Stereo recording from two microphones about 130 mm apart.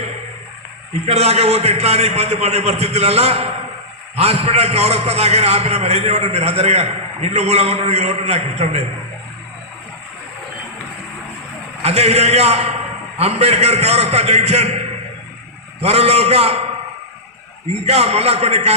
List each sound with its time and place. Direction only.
1.0 s a man's voice: 55° right (ahead or behind)
11.8 s a man's voice: 55° right (ahead or behind)
17.7 s a man's voice: 55° right (ahead or behind)